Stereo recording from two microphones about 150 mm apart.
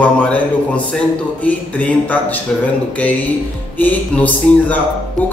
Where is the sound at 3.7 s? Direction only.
10° left (ahead or behind).